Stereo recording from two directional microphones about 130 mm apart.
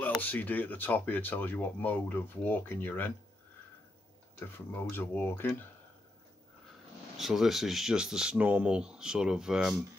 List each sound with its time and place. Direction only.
0.2 s speech: 15° left (ahead or behind)
4.4 s speech: 15° left (ahead or behind)
7.2 s speech: centre (ahead or behind)